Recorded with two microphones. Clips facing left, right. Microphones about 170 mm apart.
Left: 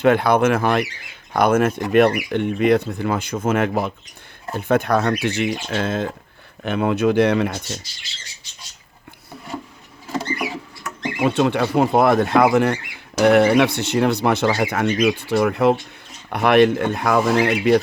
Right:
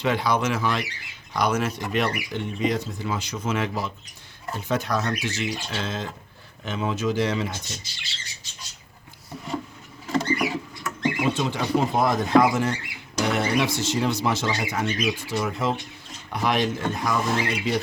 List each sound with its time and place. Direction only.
0.0 s speech: 55° left (ahead or behind)
10.3 s a sound: 5° left (ahead or behind)
11.2 s speech: 65° left (ahead or behind)